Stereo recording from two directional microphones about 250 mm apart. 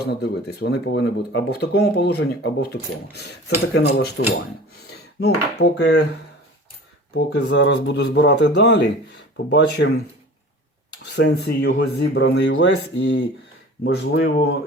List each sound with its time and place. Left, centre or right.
0.0 s speech: left
3.8 s speech: left
5.2 s speech: left
7.1 s speech: left
11.1 s speech: left